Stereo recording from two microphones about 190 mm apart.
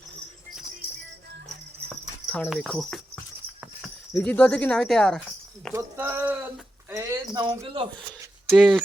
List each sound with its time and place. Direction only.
2.3 s speech: 5° left (ahead or behind)
5.7 s speech: 10° right (ahead or behind)
7.3 s speech: 25° right (ahead or behind)
8.4 s speech: 5° left (ahead or behind)